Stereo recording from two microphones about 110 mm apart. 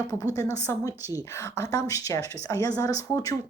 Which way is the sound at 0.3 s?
30° left (ahead or behind).